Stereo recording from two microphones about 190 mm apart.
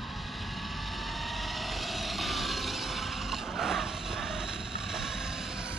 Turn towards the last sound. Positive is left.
turn(degrees=0)  # may be behind; listen again after turning